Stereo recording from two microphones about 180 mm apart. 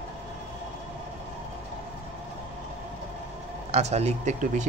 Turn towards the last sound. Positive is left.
turn(degrees=-40)  # may be behind; listen again after turning